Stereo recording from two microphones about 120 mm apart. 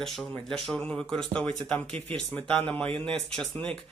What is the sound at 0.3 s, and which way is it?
Speech, 5° left (ahead or behind).